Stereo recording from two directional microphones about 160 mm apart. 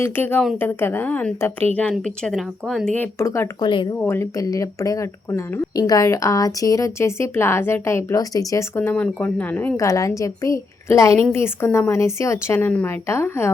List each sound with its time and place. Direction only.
0.0 s speech: 10° left (ahead or behind)
3.7 s speech: 30° left (ahead or behind)
3.9 s speech: 15° left (ahead or behind)